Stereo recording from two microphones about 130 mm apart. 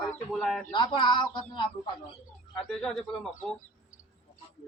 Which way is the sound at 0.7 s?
35° left (ahead or behind).